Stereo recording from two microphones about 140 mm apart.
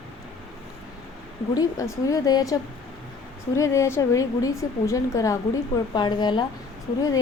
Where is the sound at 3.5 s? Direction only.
20° left (ahead or behind).